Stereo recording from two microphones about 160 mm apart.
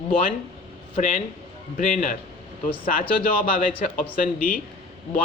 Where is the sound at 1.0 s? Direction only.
55° left (ahead or behind).